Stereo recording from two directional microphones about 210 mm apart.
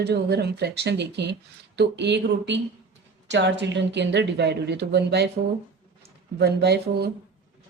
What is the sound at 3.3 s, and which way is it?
Speech, 55° right (ahead or behind).